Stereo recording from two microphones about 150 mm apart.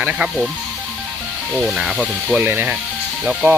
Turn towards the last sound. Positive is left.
turn(degrees=-5)  # may be behind; listen again after turning